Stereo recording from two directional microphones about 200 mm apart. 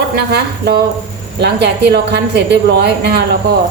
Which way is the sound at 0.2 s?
55° right (ahead or behind).